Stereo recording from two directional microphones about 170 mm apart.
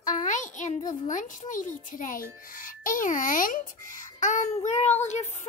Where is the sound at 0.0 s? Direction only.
50° left (ahead or behind).